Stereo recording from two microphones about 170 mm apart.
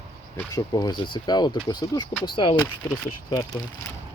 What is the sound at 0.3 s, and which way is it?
Speech, 20° left (ahead or behind).